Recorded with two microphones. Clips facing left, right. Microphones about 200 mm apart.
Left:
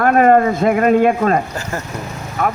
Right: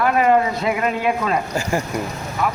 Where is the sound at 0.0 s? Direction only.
50° left (ahead or behind).